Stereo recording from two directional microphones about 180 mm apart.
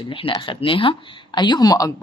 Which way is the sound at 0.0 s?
30° left (ahead or behind).